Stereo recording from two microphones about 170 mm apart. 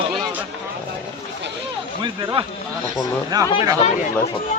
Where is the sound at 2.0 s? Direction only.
25° right (ahead or behind).